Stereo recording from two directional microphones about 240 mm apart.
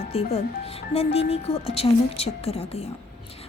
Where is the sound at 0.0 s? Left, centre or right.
Left.